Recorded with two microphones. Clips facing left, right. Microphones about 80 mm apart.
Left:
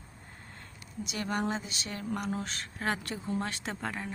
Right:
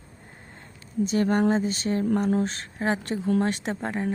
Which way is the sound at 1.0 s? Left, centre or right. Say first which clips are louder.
Right 11 dB; right.